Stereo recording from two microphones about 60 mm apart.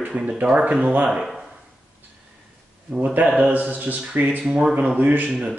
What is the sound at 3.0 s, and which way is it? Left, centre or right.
Speech, right.